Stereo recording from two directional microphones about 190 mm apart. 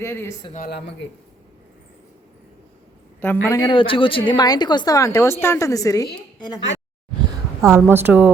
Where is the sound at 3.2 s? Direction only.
10° left (ahead or behind).